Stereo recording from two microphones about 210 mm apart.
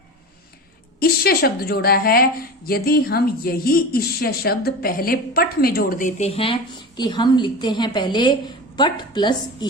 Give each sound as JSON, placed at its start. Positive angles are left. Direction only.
{"t": 0.9, "sound": "a woman's voice", "side_deg": 45}